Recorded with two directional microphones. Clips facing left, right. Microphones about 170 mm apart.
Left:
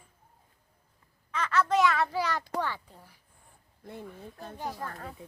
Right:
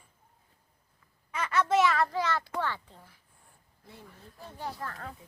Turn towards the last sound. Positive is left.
turn(degrees=20)  # may be behind; listen again after turning